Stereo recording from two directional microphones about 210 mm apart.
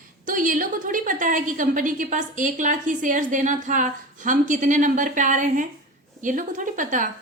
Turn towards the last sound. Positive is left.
turn(degrees=-40)  # may be behind; listen again after turning